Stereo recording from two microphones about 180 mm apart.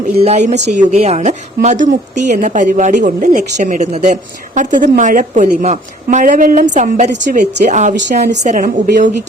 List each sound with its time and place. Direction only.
0.2 s a woman's voice: 35° right (ahead or behind)